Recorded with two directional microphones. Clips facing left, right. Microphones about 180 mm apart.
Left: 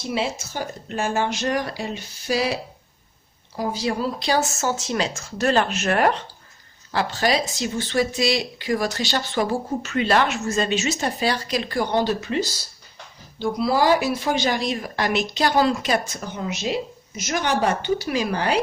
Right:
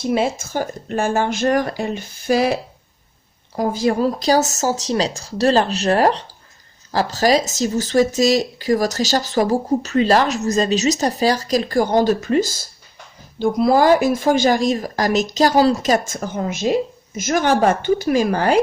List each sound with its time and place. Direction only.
0.0 s speech: 50° right (ahead or behind)